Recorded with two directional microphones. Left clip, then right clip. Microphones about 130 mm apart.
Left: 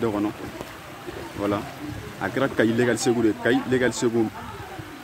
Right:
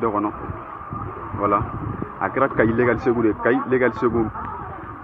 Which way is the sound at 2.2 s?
20° left (ahead or behind).